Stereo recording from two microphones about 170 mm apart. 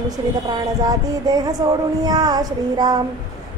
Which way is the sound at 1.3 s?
20° right (ahead or behind).